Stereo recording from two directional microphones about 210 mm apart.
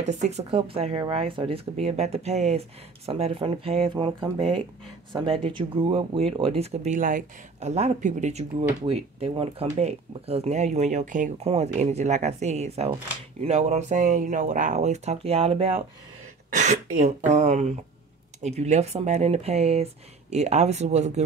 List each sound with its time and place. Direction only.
0.0 s speech: 35° right (ahead or behind)
16.4 s throat clearing: 35° right (ahead or behind)
17.3 s speech: 35° right (ahead or behind)